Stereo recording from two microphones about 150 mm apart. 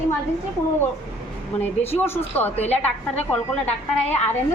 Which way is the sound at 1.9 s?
15° left (ahead or behind).